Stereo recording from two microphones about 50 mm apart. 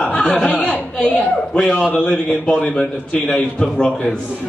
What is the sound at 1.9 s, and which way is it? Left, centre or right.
Speech, left.